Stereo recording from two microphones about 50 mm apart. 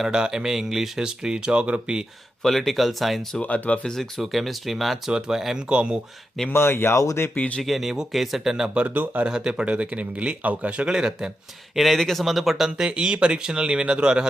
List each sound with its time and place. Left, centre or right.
0.0 s speech: centre
2.4 s speech: centre
3.4 s speech: left
4.2 s speech: centre
5.6 s speech: right
6.5 s speech: left
7.3 s speech: left
7.6 s speech: centre
8.7 s speech: right
11.7 s speech: centre